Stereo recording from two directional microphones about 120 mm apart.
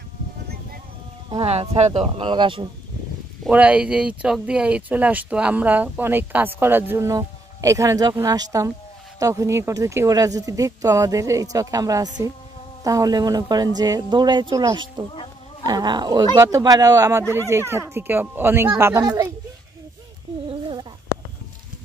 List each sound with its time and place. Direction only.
1.4 s speech: 55° right (ahead or behind)
2.1 s speech: 45° right (ahead or behind)
3.4 s speech: 10° right (ahead or behind)
7.1 s speech: 30° right (ahead or behind)